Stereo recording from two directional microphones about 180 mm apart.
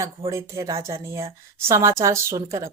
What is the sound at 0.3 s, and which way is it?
Speech, 15° right (ahead or behind).